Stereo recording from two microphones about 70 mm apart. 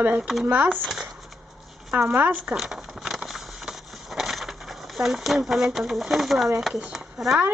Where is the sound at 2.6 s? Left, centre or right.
Centre.